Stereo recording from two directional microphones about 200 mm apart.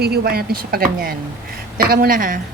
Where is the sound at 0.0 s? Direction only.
50° right (ahead or behind).